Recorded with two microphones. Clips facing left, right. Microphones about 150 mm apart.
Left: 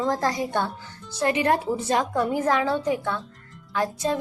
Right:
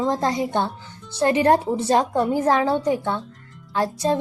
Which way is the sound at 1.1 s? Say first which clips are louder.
Right 5 dB; 30° right (ahead or behind).